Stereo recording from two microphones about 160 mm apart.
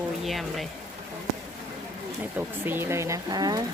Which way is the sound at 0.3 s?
Centre (ahead or behind).